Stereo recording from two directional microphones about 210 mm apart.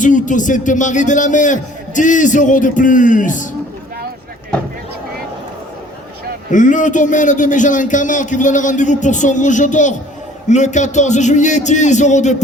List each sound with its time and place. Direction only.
0.0 s a man's voice: 35° left (ahead or behind)
6.5 s a man's voice: 35° left (ahead or behind)